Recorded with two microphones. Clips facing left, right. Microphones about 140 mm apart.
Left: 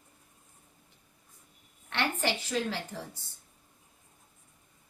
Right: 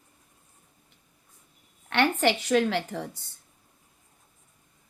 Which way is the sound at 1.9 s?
70° right (ahead or behind).